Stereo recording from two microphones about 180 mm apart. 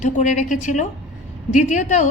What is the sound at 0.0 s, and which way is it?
A woman's voice, 40° left (ahead or behind).